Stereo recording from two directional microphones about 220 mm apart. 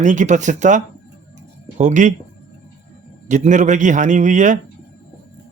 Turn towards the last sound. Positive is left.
turn(degrees=-35)  # may be behind; listen again after turning